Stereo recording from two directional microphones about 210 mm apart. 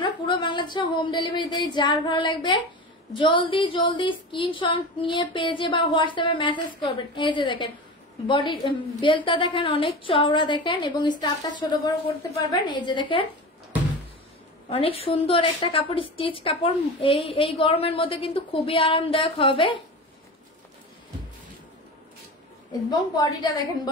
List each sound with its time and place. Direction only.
0.0 s a woman's voice: 25° left (ahead or behind)
14.7 s a woman's voice: 25° left (ahead or behind)
22.7 s a woman's voice: 15° left (ahead or behind)